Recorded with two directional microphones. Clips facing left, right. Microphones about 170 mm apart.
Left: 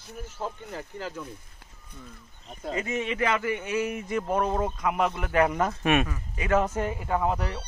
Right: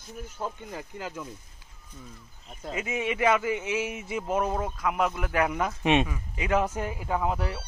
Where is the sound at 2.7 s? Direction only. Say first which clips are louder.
Left 1 dB; 10° right (ahead or behind).